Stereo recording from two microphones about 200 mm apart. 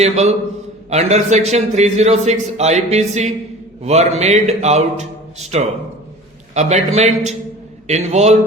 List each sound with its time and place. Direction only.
0.0 s a man's voice: 35° right (ahead or behind)